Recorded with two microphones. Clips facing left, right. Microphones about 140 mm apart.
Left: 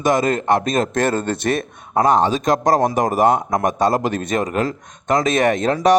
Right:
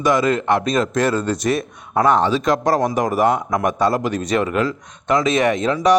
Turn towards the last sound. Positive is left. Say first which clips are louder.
# left 1 dB
turn(degrees=50)  # may be behind; listen again after turning